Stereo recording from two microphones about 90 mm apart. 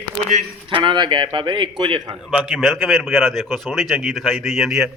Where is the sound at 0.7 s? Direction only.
60° right (ahead or behind).